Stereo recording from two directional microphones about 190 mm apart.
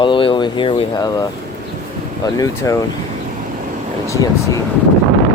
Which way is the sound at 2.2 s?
20° left (ahead or behind).